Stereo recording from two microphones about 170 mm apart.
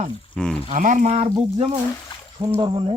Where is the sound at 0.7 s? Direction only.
50° right (ahead or behind).